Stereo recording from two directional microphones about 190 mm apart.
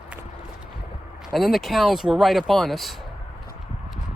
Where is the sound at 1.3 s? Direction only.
Centre (ahead or behind).